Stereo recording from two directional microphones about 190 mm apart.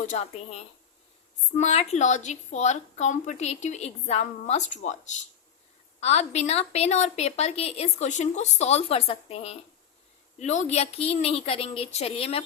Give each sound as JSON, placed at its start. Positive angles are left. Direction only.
{"t": 0.0, "sound": "a woman's voice", "side_deg": 40}
{"t": 1.5, "sound": "a woman's voice", "side_deg": 35}